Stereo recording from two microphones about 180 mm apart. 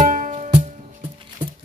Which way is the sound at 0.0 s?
50° right (ahead or behind).